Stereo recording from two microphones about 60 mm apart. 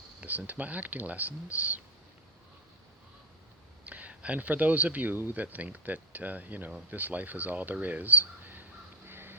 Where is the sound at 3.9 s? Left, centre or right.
Right.